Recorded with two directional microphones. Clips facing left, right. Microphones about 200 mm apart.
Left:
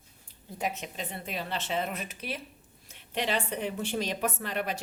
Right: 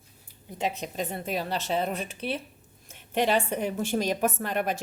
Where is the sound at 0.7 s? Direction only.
40° right (ahead or behind).